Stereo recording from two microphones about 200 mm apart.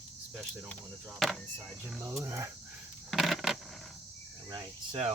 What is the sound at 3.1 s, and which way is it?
Coin, centre (ahead or behind).